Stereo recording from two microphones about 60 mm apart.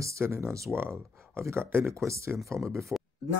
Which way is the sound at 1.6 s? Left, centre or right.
Centre.